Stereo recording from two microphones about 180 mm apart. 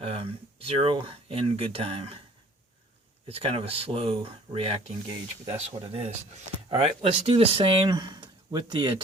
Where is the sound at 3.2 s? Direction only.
30° right (ahead or behind).